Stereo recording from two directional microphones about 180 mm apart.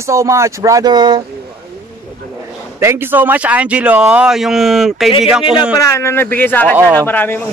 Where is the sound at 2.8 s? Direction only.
10° right (ahead or behind).